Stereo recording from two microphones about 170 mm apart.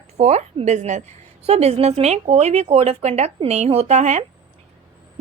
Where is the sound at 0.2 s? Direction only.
40° right (ahead or behind).